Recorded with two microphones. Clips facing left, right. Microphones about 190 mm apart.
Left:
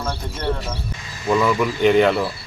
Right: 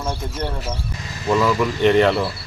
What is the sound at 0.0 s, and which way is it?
Speech, 20° right (ahead or behind).